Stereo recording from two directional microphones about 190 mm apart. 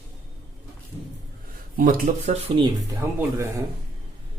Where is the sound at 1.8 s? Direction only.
45° right (ahead or behind).